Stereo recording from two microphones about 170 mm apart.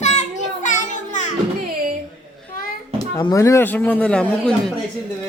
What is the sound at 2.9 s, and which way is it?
Speech, 20° left (ahead or behind).